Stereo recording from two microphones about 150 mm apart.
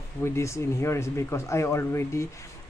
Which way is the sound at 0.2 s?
20° left (ahead or behind).